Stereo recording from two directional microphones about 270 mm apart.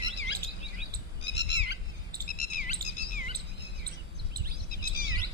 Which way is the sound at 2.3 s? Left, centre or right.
Left.